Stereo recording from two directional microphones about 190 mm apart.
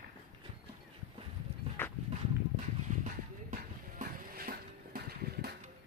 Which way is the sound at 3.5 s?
45° right (ahead or behind).